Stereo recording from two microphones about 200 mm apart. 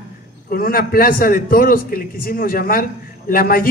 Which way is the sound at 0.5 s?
45° left (ahead or behind).